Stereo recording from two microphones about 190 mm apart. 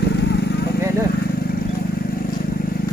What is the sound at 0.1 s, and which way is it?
Vehicle, 60° left (ahead or behind).